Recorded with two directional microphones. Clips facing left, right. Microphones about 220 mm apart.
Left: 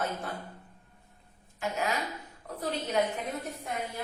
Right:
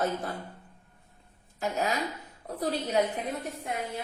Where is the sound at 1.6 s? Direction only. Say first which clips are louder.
Right 2 dB; 35° right (ahead or behind).